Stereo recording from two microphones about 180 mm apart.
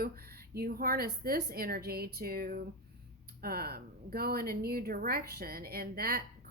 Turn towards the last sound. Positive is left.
turn(degrees=-55)  # may be behind; listen again after turning